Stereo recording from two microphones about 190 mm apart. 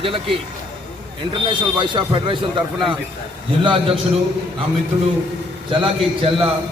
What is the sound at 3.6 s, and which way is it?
Speech, 30° right (ahead or behind).